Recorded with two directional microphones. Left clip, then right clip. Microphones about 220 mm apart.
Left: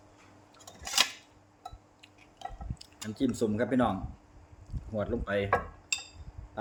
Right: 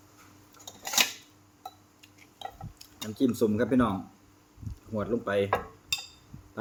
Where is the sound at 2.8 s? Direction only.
15° right (ahead or behind).